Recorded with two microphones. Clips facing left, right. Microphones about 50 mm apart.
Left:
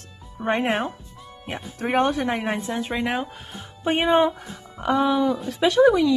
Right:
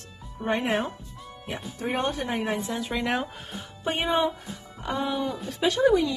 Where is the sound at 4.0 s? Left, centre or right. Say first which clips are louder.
Left 6 dB; left.